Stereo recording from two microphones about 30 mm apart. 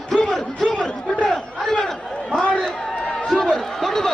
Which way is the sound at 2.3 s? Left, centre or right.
Left.